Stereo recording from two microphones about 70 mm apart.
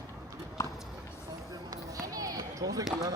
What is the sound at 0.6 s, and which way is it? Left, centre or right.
Clip-clop, left.